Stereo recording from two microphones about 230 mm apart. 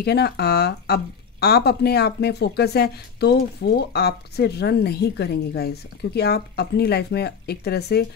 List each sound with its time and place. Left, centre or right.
0.0 s speech: left